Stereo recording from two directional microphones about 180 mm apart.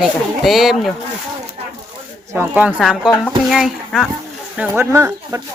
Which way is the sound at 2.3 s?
10° right (ahead or behind).